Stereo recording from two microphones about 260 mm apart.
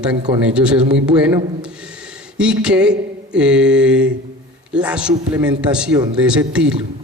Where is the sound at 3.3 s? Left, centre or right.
Centre.